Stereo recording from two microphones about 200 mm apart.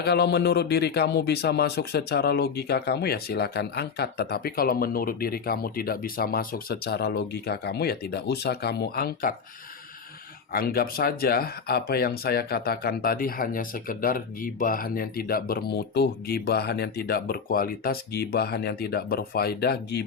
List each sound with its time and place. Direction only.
0.0 s speech: 55° left (ahead or behind)
10.5 s speech: 50° left (ahead or behind)